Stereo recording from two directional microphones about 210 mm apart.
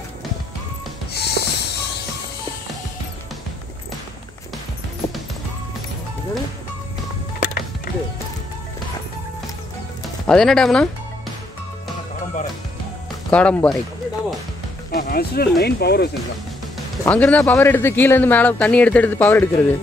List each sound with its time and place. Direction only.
1.1 s music: 50° left (ahead or behind)
7.3 s music: 40° left (ahead or behind)
10.2 s speech: 5° left (ahead or behind)
13.3 s speech: 5° left (ahead or behind)
14.9 s speech: 45° left (ahead or behind)
17.0 s speech: 5° left (ahead or behind)